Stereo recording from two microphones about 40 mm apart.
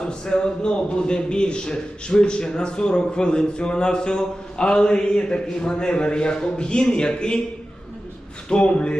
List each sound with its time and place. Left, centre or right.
0.0 s a man's voice: left
8.4 s a man's voice: left